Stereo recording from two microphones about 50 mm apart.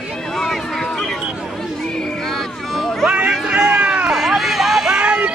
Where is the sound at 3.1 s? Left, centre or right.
Right.